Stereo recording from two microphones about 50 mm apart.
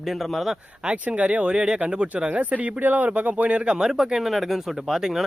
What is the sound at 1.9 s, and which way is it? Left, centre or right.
Speech, right.